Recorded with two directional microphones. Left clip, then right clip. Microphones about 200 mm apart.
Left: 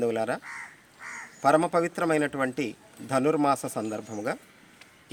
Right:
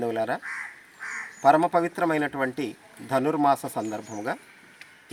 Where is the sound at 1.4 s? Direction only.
25° left (ahead or behind).